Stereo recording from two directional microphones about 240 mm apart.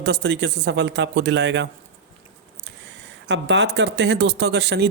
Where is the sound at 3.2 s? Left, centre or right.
Right.